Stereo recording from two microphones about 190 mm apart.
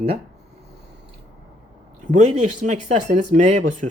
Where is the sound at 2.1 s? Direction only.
40° right (ahead or behind).